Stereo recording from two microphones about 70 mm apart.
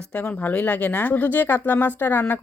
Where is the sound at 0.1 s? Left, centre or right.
Centre.